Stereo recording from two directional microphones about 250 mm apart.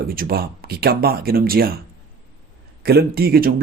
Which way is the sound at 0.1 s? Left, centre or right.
Right.